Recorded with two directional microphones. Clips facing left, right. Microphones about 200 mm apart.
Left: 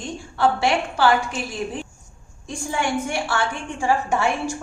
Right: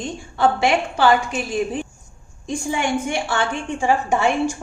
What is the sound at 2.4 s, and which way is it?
A woman's voice, 20° right (ahead or behind).